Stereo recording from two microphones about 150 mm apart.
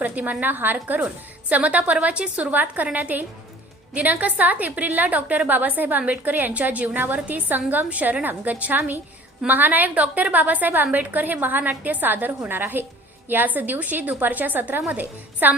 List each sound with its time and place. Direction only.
0.0 s a woman's voice: 10° right (ahead or behind)